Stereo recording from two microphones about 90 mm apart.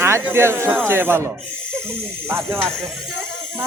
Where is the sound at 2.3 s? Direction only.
25° right (ahead or behind).